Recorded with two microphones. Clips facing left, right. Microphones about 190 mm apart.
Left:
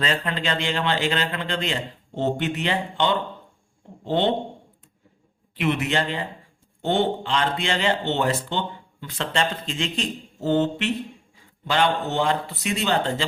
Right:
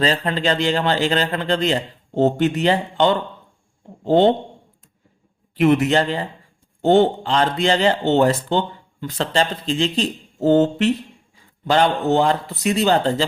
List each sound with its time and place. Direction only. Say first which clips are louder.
0.0 s speech: right 6 dB; 35° right (ahead or behind)
5.5 s speech: right 8 dB; 45° right (ahead or behind)